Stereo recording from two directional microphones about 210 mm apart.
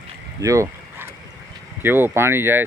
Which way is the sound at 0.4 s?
15° right (ahead or behind).